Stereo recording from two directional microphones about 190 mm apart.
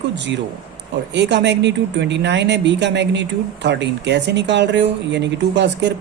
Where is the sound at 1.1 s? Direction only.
65° right (ahead or behind).